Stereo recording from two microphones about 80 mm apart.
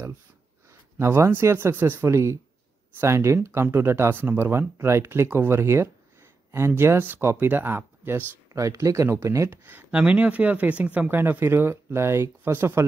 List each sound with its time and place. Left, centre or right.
0.7 s speech: right
8.5 s speech: right
9.5 s speech: right
11.1 s speech: right